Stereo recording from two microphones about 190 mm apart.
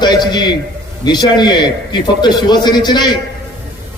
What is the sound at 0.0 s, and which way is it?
A man's voice, 25° left (ahead or behind).